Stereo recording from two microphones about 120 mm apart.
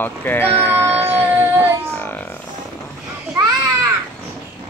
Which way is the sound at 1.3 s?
20° right (ahead or behind).